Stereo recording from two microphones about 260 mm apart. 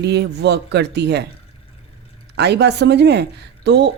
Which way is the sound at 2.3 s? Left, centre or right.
Right.